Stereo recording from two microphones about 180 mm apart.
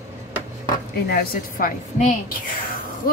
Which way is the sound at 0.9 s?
65° left (ahead or behind).